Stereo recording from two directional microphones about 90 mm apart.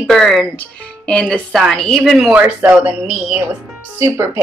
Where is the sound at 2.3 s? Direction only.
15° right (ahead or behind).